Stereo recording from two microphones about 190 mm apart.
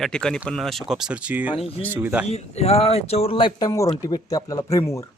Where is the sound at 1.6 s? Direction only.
30° left (ahead or behind).